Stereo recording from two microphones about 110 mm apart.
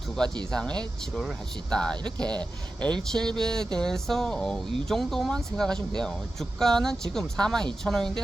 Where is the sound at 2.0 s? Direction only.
40° right (ahead or behind).